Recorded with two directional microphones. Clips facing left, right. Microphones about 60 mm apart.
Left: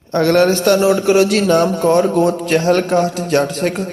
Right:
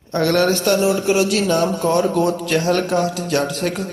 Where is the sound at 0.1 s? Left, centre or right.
Left.